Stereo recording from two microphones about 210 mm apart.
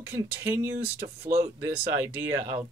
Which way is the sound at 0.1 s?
10° right (ahead or behind).